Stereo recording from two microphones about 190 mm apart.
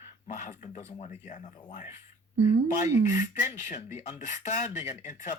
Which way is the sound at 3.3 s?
40° left (ahead or behind).